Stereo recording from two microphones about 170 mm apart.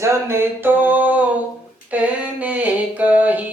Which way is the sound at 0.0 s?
15° right (ahead or behind).